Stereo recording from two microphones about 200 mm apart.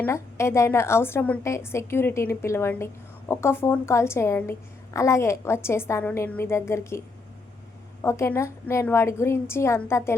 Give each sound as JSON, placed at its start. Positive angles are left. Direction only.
{"t": 0.0, "sound": "a woman's voice", "side_deg": 15}
{"t": 8.0, "sound": "a woman's voice", "side_deg": 15}